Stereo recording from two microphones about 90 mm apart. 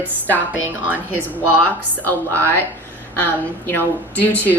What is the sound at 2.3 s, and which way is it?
A woman's voice, 25° left (ahead or behind).